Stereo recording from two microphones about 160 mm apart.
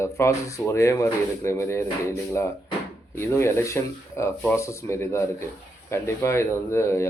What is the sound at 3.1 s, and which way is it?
Speech, 15° left (ahead or behind).